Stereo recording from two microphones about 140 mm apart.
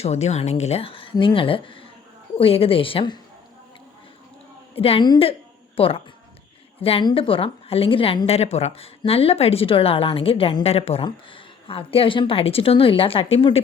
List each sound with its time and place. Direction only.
0.0 s a woman's voice: 50° left (ahead or behind)
4.7 s a woman's voice: 45° left (ahead or behind)
5.0 s a woman's voice: 30° left (ahead or behind)
5.7 s speech: 45° left (ahead or behind)
7.0 s a woman's voice: 40° left (ahead or behind)